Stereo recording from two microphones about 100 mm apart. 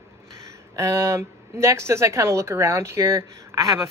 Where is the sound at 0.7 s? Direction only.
30° right (ahead or behind).